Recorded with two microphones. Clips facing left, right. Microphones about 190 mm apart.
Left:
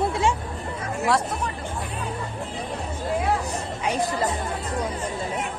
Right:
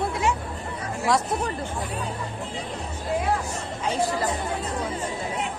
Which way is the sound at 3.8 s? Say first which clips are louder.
Even; 15° left (ahead or behind).